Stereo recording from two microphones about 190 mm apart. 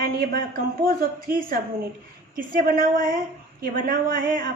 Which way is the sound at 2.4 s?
45° right (ahead or behind).